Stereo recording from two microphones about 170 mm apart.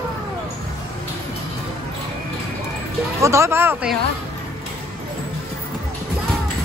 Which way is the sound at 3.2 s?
15° right (ahead or behind).